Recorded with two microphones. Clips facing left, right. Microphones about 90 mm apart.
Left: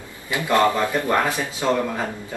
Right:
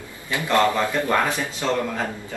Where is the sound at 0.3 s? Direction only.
20° left (ahead or behind).